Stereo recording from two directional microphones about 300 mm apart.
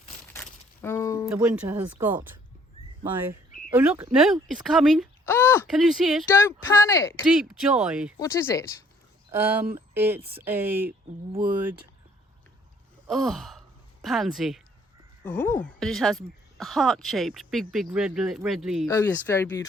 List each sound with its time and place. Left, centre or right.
0.3 s a sound: centre
1.3 s speech: centre
7.3 s speech: centre
8.2 s speech: centre
9.3 s speech: centre
13.1 s speech: centre